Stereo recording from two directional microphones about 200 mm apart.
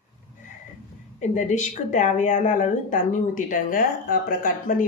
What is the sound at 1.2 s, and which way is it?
Speech, 40° left (ahead or behind).